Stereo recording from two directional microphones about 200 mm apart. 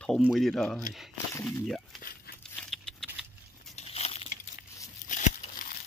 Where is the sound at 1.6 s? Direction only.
Centre (ahead or behind).